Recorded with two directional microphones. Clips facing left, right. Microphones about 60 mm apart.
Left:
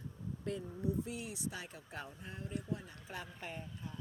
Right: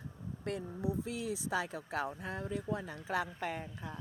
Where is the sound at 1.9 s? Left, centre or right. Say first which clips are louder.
Right 10 dB; right.